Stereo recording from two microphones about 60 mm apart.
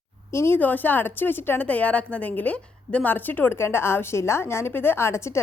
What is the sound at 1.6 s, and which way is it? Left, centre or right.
A woman's voice, left.